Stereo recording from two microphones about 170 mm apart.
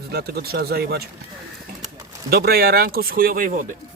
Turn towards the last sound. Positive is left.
turn(degrees=-50)  # may be behind; listen again after turning